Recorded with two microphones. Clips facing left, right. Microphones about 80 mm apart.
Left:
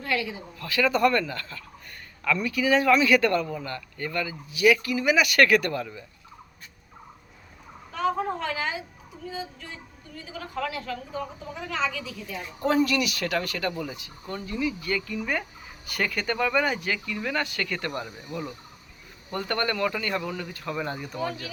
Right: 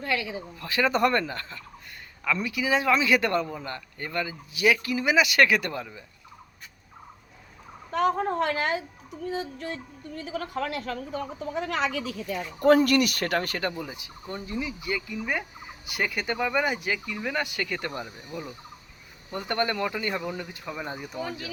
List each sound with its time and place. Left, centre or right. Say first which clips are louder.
0.0 s speech: even; right
7.9 s a woman's voice: right 3 dB; right
13.7 s speech: left 2 dB; centre
18.0 s speech: left 2 dB; centre